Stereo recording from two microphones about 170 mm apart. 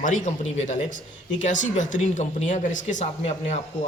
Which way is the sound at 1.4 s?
45° left (ahead or behind).